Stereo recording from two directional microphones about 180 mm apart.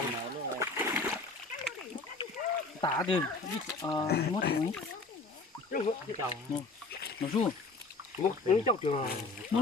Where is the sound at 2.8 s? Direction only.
25° left (ahead or behind).